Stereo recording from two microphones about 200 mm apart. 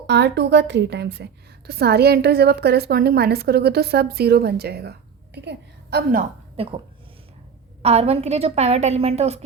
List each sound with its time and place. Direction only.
0.1 s a woman's voice: 60° right (ahead or behind)
6.6 s a woman's voice: 25° right (ahead or behind)